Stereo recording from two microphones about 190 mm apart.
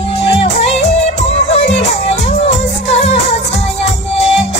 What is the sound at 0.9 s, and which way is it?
Music, 35° left (ahead or behind).